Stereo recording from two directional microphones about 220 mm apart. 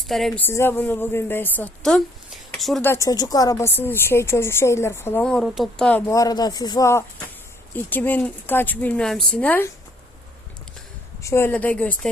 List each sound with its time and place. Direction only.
0.1 s a woman's voice: centre (ahead or behind)
2.9 s a woman's voice: 15° left (ahead or behind)
6.1 s a woman's voice: 15° left (ahead or behind)
11.2 s a woman's voice: 10° left (ahead or behind)